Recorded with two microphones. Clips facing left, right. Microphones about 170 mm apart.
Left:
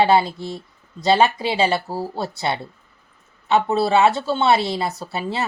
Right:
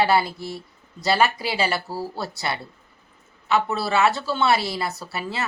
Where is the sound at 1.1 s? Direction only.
20° left (ahead or behind).